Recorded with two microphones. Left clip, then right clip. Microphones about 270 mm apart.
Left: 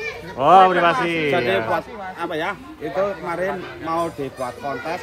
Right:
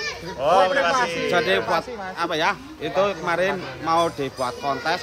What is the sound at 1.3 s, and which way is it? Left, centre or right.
Speech, centre.